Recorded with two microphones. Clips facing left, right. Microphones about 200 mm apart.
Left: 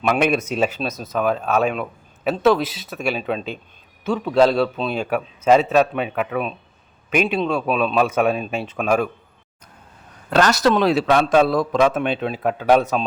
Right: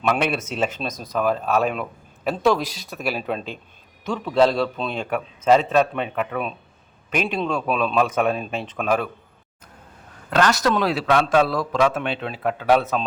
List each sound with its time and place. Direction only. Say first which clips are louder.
0.1 s a man's voice: left 4 dB; 15° left (ahead or behind)
10.2 s speech: left 2 dB; 35° left (ahead or behind)
10.7 s a man's voice: left 4 dB; 25° left (ahead or behind)